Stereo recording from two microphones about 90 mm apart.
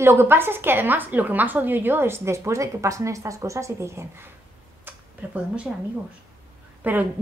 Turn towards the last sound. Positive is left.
turn(degrees=-20)  # may be behind; listen again after turning